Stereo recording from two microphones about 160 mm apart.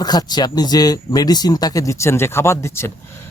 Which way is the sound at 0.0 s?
25° left (ahead or behind).